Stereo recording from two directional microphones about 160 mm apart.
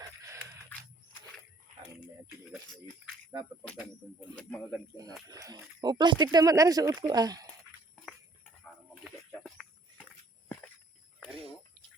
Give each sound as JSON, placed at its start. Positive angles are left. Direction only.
{"t": 0.0, "sound": "a sound", "side_deg": -20}
{"t": 4.0, "sound": "speech", "side_deg": -15}
{"t": 4.4, "sound": "speech", "side_deg": 5}
{"t": 5.3, "sound": "speech", "side_deg": -25}
{"t": 7.9, "sound": "music", "side_deg": 5}